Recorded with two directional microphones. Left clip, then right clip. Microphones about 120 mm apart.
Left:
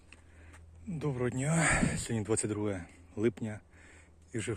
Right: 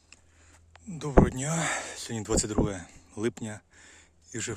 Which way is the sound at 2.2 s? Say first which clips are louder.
Right 6 dB; 45° right (ahead or behind).